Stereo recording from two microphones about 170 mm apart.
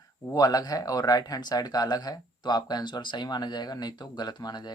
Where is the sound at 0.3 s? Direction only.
20° left (ahead or behind).